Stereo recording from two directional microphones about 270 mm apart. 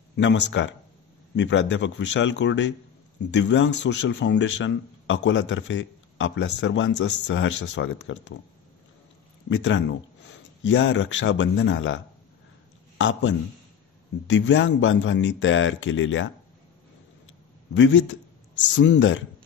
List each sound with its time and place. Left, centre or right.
0.1 s a man's voice: left
9.5 s a man's voice: left
17.7 s a man's voice: left